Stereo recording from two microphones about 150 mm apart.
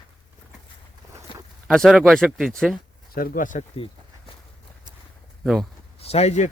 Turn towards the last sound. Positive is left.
turn(degrees=45)  # may be behind; listen again after turning